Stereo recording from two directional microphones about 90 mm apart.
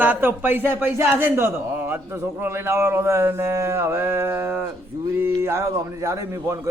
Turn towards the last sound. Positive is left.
turn(degrees=-35)  # may be behind; listen again after turning